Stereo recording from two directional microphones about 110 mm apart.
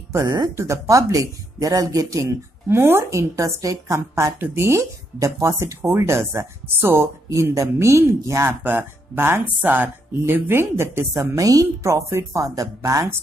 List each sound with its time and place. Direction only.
0.1 s speech: 35° right (ahead or behind)
8.5 s speech: 15° right (ahead or behind)